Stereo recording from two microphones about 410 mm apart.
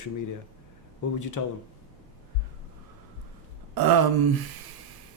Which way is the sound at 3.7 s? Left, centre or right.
Right.